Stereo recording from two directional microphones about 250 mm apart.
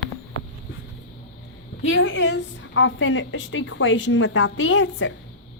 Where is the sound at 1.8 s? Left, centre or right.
Left.